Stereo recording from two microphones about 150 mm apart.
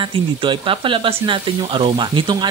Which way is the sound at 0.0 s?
35° right (ahead or behind).